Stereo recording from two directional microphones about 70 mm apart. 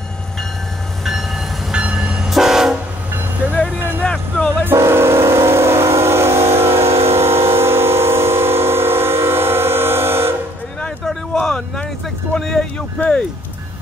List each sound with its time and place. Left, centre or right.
1.0 s train: centre
4.0 s vehicle: centre
4.6 s train: right
11.3 s a sound: centre
12.4 s vehicle: centre